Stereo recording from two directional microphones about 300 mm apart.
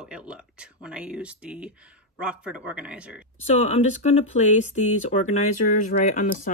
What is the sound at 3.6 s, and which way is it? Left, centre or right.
Speech, left.